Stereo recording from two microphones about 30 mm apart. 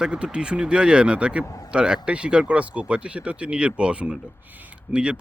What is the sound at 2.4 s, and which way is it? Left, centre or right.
Speech, right.